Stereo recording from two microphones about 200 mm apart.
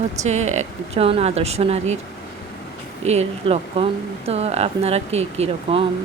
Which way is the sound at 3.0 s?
35° right (ahead or behind).